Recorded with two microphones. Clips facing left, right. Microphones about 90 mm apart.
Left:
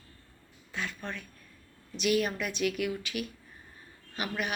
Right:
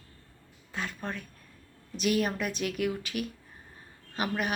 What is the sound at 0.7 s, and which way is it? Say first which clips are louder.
Mantra: right 2 dB; 40° right (ahead or behind).